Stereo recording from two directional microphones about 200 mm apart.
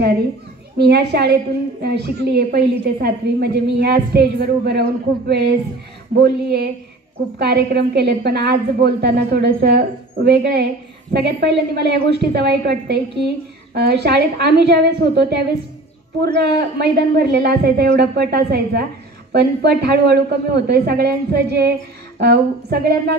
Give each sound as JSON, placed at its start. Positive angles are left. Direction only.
{"t": 0.7, "sound": "a woman's voice", "side_deg": -55}